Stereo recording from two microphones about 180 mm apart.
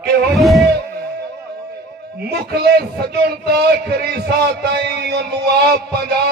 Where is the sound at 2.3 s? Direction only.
60° right (ahead or behind).